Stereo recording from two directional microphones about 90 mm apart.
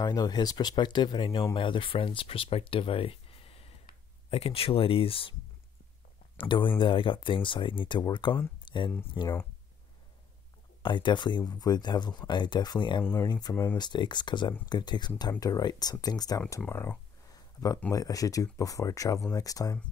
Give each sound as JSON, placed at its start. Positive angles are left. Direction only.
{"t": 0.0, "sound": "speech", "side_deg": 50}
{"t": 6.3, "sound": "speech", "side_deg": 65}
{"t": 8.6, "sound": "a sound", "side_deg": 65}
{"t": 10.8, "sound": "speech", "side_deg": 60}
{"t": 13.0, "sound": "speech", "side_deg": 25}
{"t": 13.3, "sound": "speech", "side_deg": 50}
{"t": 16.6, "sound": "speech", "side_deg": 25}
{"t": 17.3, "sound": "a sound", "side_deg": 40}
{"t": 17.9, "sound": "speech", "side_deg": 40}